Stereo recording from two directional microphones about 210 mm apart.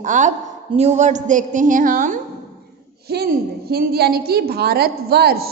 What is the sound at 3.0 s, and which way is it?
A woman's voice, 50° right (ahead or behind).